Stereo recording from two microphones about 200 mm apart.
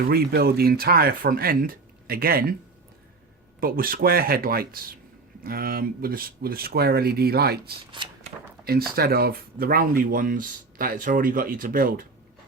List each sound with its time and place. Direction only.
0.1 s speech: 50° right (ahead or behind)
3.6 s speech: 45° right (ahead or behind)
8.0 s a sound: 25° right (ahead or behind)
9.0 s speech: 50° right (ahead or behind)